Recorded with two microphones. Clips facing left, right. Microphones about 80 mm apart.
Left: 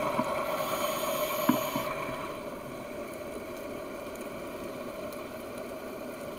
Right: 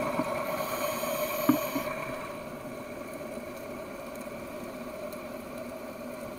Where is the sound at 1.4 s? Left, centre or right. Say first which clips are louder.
Right 3 dB; left.